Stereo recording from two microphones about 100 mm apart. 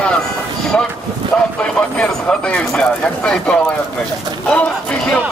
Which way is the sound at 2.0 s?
10° left (ahead or behind).